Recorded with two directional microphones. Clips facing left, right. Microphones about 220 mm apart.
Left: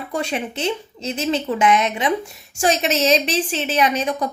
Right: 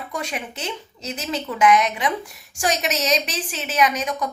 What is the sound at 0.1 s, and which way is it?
A woman's voice, 30° left (ahead or behind).